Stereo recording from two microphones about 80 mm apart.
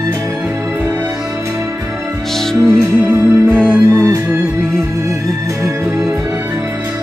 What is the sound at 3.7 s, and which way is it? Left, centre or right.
Music, right.